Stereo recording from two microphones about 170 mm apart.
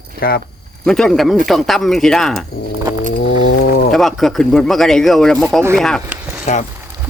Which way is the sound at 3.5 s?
70° left (ahead or behind).